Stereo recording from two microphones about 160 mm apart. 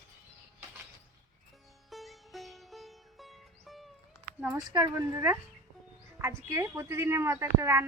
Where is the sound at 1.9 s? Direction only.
Centre (ahead or behind).